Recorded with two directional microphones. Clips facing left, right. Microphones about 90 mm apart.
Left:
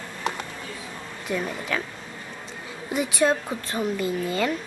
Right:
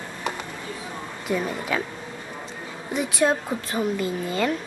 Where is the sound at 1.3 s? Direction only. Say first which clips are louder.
Right 2 dB; 5° right (ahead or behind).